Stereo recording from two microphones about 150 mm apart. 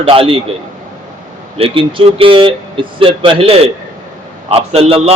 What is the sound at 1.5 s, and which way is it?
A man's voice, 40° right (ahead or behind).